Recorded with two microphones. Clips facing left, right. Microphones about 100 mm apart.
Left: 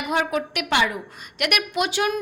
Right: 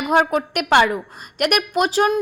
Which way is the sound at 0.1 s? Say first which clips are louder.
Right 6 dB; 40° right (ahead or behind).